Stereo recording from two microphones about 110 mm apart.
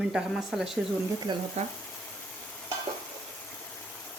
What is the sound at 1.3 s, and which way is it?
Speech, 45° right (ahead or behind).